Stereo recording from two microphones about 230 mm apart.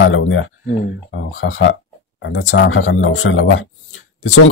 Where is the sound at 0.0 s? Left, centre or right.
Left.